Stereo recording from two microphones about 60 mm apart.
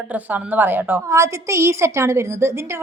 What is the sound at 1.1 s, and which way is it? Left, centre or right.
A woman's voice, right.